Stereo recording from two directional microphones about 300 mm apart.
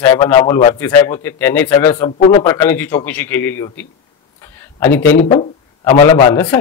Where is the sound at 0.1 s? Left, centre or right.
Centre.